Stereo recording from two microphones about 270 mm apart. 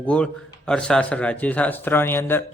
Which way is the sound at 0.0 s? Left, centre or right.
Centre.